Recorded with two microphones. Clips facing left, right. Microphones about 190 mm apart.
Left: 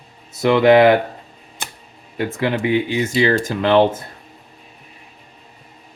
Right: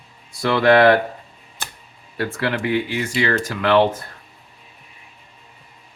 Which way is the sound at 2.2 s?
20° left (ahead or behind).